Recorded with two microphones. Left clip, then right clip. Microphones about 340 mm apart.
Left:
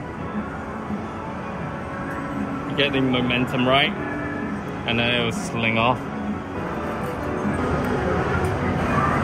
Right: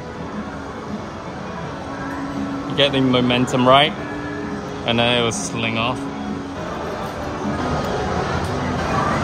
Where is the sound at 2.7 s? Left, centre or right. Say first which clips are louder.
Right 5 dB; right.